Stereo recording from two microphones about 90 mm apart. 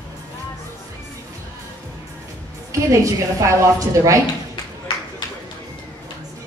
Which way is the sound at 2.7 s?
35° right (ahead or behind).